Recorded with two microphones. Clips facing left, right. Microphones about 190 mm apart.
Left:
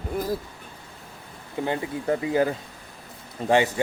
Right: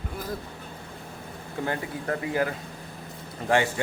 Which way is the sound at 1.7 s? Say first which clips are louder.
Left 5 dB; 20° left (ahead or behind).